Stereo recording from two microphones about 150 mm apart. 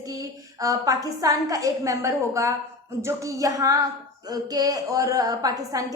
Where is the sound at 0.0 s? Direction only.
20° right (ahead or behind).